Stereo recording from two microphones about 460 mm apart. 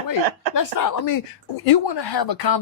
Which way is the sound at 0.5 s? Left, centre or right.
Left.